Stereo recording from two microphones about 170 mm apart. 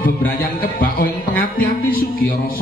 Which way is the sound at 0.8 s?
60° left (ahead or behind).